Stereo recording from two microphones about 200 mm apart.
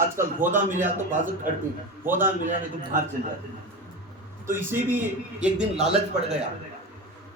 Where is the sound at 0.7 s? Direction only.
40° right (ahead or behind).